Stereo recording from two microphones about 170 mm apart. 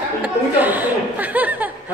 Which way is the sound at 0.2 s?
10° right (ahead or behind).